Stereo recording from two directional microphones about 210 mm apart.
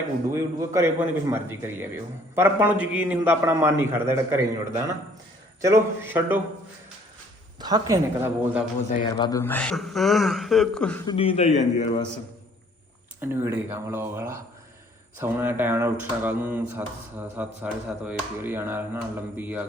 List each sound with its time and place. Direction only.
0.3 s speech: 10° right (ahead or behind)
7.6 s speech: 15° right (ahead or behind)
9.0 s speech: 20° left (ahead or behind)
11.0 s a man's voice: 25° left (ahead or behind)
13.2 s speech: 10° right (ahead or behind)